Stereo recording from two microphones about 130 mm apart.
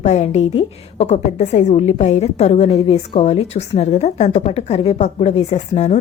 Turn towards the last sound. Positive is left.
turn(degrees=65)  # may be behind; listen again after turning